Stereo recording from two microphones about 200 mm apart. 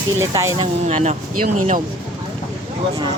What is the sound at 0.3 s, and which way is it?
Speech, 15° right (ahead or behind).